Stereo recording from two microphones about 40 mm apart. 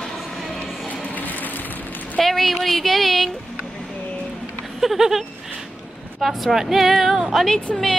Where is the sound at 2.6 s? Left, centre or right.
Centre.